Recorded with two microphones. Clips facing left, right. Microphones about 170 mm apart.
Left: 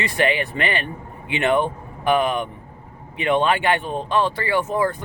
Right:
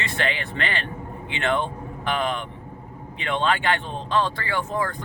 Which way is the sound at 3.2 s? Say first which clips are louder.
Left 5 dB; 15° left (ahead or behind).